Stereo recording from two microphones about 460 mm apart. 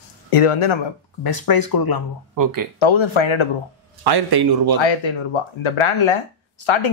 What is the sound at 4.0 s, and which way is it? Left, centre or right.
Speech, right.